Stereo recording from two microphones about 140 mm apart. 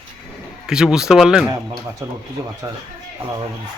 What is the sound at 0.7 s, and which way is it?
Speech, 5° right (ahead or behind).